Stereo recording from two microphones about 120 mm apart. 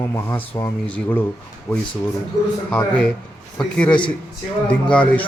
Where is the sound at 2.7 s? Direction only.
5° left (ahead or behind).